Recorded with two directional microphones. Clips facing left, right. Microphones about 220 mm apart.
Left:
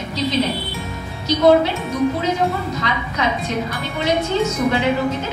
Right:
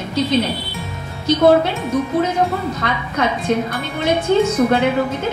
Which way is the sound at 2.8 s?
50° right (ahead or behind).